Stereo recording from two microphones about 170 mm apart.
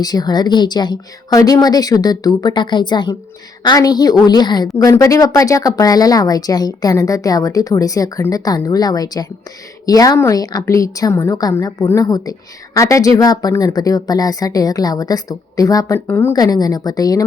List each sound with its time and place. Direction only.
0.0 s speech: 25° left (ahead or behind)